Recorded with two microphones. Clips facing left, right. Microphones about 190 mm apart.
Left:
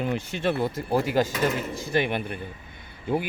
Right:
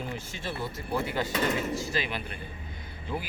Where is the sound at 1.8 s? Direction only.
55° left (ahead or behind).